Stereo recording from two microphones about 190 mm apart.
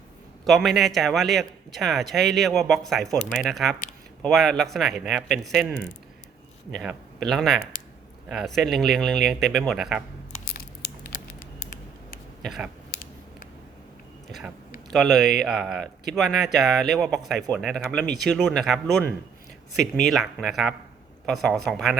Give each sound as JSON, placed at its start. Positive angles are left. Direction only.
{"t": 0.4, "sound": "a man's voice", "side_deg": 0}
{"t": 10.5, "sound": "a sound", "side_deg": 50}
{"t": 12.4, "sound": "speech", "side_deg": 0}
{"t": 14.8, "sound": "a man's voice", "side_deg": 0}